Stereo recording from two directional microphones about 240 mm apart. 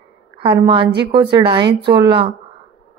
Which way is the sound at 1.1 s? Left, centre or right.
Right.